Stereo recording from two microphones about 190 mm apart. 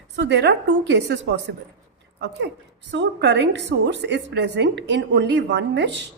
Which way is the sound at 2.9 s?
65° right (ahead or behind).